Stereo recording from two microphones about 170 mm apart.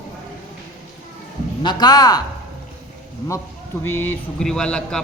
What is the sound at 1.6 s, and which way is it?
Speech, 25° left (ahead or behind).